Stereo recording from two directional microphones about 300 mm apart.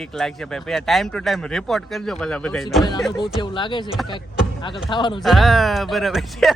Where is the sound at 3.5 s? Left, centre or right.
Centre.